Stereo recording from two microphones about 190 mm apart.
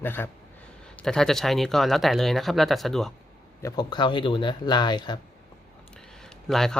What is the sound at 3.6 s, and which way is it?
Speech, 20° left (ahead or behind).